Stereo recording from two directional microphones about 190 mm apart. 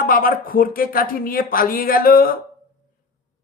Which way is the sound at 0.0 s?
50° left (ahead or behind).